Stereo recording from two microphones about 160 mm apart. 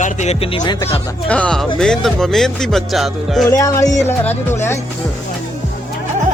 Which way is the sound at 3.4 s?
20° left (ahead or behind).